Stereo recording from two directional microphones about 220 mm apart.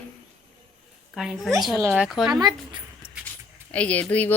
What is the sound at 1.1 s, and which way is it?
Speech, centre (ahead or behind).